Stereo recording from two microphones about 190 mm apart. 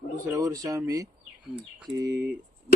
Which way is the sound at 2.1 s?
60° right (ahead or behind).